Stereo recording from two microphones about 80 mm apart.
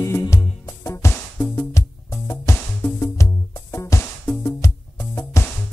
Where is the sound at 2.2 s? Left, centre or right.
Left.